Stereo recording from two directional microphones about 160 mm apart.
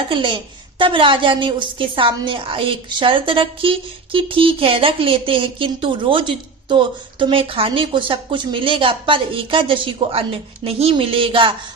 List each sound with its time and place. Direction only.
0.1 s a woman's voice: 30° right (ahead or behind)